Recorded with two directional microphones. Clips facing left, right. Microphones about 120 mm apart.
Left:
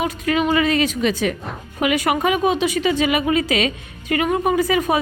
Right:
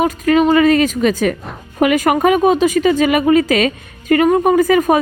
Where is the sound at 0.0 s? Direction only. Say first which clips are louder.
Right 7 dB; 45° right (ahead or behind).